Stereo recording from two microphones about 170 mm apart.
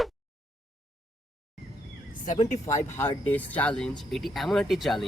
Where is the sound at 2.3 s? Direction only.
45° left (ahead or behind).